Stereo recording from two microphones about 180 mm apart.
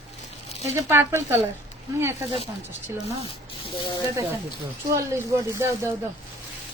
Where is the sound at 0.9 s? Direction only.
15° right (ahead or behind).